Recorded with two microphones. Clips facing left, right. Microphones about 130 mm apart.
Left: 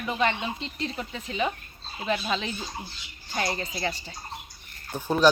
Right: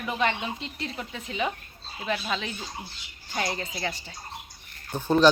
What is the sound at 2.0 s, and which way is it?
A woman's voice, 5° left (ahead or behind).